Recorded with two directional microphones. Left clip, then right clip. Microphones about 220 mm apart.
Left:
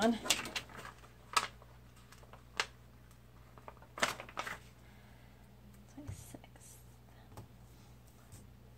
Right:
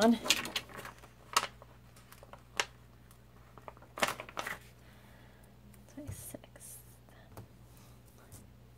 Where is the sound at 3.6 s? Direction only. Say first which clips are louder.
Right 2 dB; 30° right (ahead or behind).